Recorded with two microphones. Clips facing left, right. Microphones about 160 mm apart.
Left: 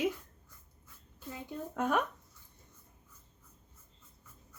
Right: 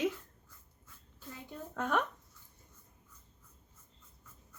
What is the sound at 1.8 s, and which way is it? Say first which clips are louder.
Speech: left 2 dB; 10° left (ahead or behind).